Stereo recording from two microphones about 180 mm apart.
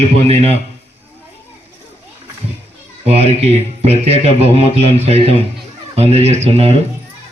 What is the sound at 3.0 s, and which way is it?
Speech, 35° right (ahead or behind).